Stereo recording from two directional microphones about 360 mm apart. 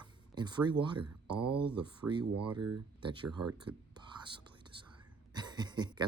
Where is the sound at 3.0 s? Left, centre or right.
Centre.